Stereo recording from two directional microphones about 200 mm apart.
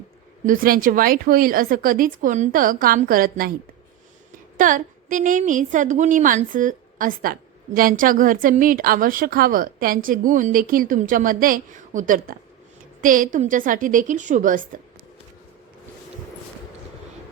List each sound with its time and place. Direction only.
0.4 s a woman's voice: 45° right (ahead or behind)
4.5 s a woman's voice: 40° right (ahead or behind)